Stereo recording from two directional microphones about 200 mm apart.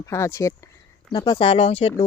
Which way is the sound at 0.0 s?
15° left (ahead or behind).